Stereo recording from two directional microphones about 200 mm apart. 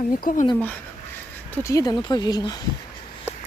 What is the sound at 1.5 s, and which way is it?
Speech, 15° left (ahead or behind).